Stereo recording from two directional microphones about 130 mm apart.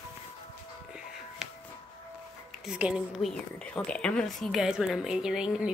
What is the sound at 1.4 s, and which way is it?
Music, 5° right (ahead or behind).